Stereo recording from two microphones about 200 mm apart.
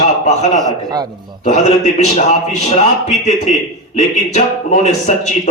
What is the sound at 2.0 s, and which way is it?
A man's voice, 35° left (ahead or behind).